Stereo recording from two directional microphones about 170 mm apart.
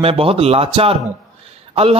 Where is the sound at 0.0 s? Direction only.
35° right (ahead or behind).